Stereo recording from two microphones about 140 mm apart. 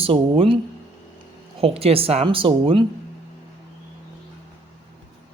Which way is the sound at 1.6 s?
45° right (ahead or behind).